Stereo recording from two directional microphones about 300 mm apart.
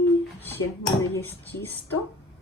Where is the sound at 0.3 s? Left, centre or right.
Centre.